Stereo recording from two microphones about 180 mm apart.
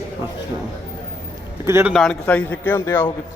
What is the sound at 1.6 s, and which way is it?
Speech, 15° right (ahead or behind).